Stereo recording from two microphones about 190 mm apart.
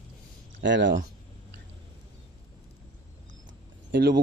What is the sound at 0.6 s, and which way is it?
Speech, 70° right (ahead or behind).